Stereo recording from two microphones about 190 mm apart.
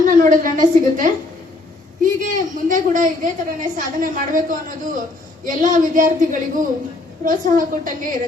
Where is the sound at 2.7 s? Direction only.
45° right (ahead or behind).